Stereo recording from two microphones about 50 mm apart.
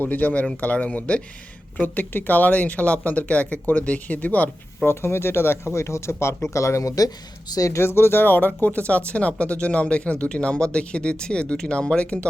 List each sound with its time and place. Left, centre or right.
0.0 s speech: left
1.8 s speech: left
4.9 s speech: left
5.7 s speech: left
7.7 s speech: left